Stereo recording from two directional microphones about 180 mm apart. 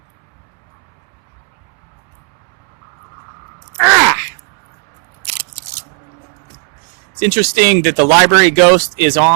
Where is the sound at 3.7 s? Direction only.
15° right (ahead or behind).